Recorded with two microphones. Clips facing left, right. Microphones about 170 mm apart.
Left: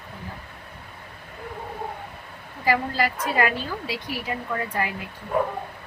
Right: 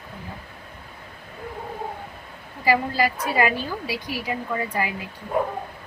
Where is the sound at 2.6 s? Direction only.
10° right (ahead or behind).